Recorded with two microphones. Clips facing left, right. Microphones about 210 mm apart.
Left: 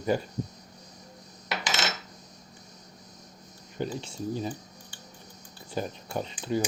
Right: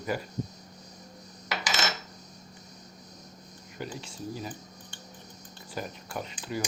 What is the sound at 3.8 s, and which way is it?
Speech, 30° left (ahead or behind).